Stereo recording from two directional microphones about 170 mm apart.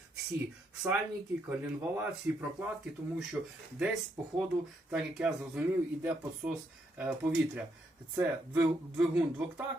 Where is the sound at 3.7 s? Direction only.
5° right (ahead or behind).